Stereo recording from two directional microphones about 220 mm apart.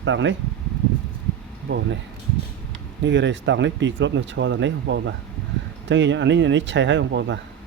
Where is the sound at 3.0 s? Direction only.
55° right (ahead or behind).